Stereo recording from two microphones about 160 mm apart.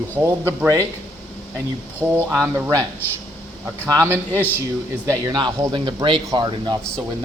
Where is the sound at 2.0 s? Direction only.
10° right (ahead or behind); by 6.8 s 30° right (ahead or behind).